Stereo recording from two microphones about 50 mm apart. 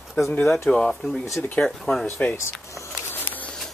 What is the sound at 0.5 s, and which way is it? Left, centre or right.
Speech, centre.